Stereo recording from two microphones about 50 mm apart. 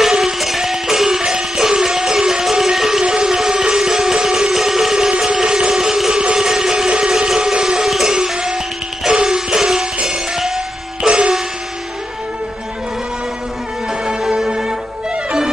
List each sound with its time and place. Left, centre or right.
0.0 s music: centre
5.2 s a sound: centre
9.0 s music: centre
14.0 s music: centre